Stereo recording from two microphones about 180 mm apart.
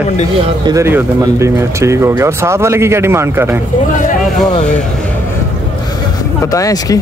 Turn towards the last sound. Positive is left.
turn(degrees=20)  # may be behind; listen again after turning